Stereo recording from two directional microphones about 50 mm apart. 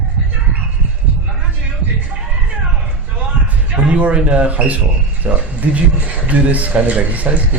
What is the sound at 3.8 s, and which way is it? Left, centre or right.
Speech, right.